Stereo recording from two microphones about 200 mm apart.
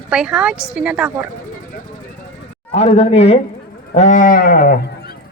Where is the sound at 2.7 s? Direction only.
30° left (ahead or behind).